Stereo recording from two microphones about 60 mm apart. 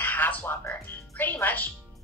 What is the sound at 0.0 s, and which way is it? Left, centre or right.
Music, left.